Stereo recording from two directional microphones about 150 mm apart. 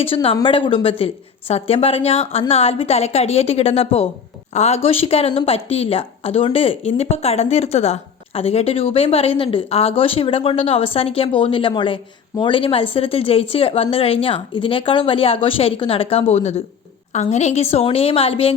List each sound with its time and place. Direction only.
0.0 s a woman's voice: 40° left (ahead or behind)